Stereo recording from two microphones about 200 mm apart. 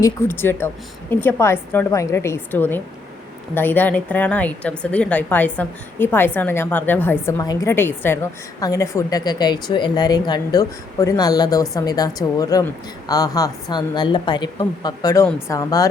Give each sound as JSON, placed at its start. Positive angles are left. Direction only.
{"t": 0.0, "sound": "a woman's voice", "side_deg": 10}